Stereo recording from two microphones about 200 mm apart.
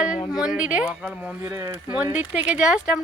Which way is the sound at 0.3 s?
5° right (ahead or behind).